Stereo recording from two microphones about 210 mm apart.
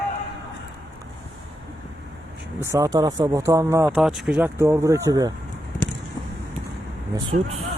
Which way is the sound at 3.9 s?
Centre (ahead or behind).